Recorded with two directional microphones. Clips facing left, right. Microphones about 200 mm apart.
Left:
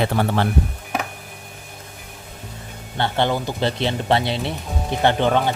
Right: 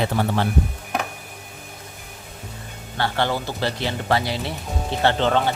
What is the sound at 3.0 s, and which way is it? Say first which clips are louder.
Speech: left 2 dB; 20° left (ahead or behind).